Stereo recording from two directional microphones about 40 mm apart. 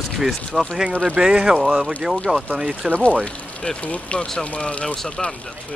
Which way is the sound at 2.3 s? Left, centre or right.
Right.